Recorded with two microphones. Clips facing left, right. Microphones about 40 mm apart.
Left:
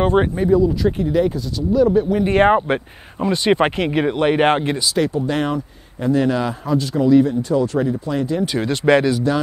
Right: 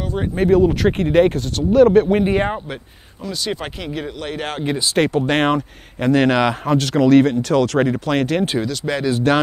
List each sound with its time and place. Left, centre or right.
0.4 s speech: right
2.5 s speech: left
4.9 s speech: right
8.6 s speech: left
9.3 s speech: right